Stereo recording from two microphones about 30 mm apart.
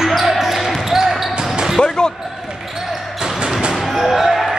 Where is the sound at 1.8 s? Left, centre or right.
Left.